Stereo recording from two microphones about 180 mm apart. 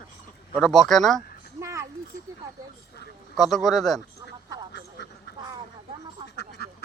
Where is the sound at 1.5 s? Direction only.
15° right (ahead or behind).